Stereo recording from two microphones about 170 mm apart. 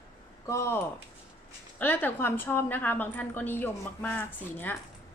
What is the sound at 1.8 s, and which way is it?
A woman's voice, 10° left (ahead or behind).